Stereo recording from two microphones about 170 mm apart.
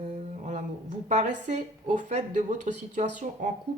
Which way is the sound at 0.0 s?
45° right (ahead or behind).